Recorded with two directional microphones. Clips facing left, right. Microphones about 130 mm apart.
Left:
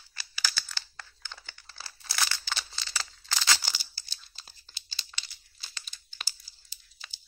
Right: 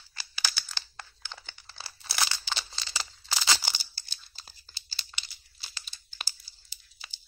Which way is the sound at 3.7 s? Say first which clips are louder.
Right 2 dB; 40° right (ahead or behind).